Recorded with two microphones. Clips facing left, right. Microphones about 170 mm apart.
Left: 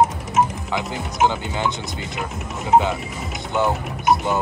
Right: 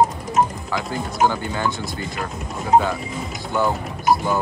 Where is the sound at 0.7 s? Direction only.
20° left (ahead or behind).